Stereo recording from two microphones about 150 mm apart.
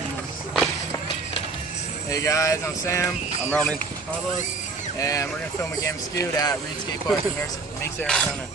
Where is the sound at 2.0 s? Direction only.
20° left (ahead or behind).